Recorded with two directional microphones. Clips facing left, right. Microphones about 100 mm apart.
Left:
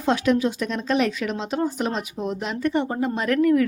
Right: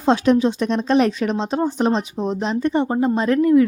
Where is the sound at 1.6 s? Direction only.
20° right (ahead or behind).